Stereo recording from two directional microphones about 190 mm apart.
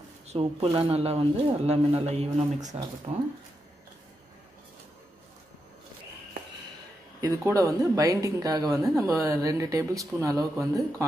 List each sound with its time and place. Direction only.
0.3 s speech: 30° right (ahead or behind)
7.2 s speech: 20° right (ahead or behind)